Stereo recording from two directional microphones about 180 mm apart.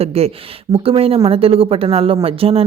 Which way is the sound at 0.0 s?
35° right (ahead or behind).